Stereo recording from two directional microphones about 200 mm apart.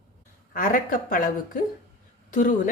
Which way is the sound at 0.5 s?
45° left (ahead or behind).